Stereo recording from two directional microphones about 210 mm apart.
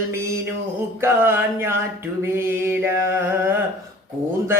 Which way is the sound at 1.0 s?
10° right (ahead or behind).